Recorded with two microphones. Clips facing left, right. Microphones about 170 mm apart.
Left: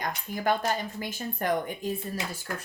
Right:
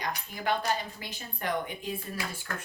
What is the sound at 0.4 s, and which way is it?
A woman's voice, 45° left (ahead or behind).